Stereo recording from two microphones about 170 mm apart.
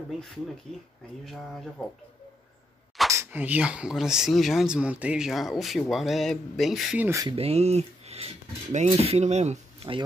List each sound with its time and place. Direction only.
1.2 s speech: centre (ahead or behind)
3.1 s speech: 15° right (ahead or behind)
7.1 s speech: 20° right (ahead or behind)
7.3 s speech: 40° right (ahead or behind)